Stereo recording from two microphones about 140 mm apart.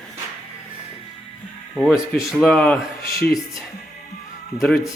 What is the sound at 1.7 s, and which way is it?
Speech, centre (ahead or behind).